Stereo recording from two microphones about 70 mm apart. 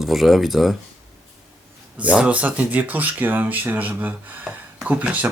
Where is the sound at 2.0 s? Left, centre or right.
Centre.